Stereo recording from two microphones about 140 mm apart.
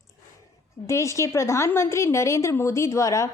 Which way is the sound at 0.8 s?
20° left (ahead or behind).